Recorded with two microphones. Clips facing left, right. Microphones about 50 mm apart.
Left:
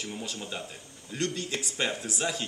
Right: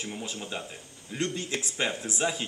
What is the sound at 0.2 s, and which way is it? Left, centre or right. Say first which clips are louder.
Speech: right 1 dB; centre.